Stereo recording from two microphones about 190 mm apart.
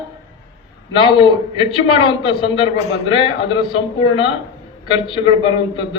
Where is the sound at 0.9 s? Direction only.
25° left (ahead or behind).